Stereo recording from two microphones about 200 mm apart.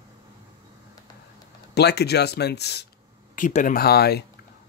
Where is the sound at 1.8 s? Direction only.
55° left (ahead or behind).